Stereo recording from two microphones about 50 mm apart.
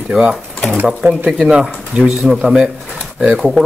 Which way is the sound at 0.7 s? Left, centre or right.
Right.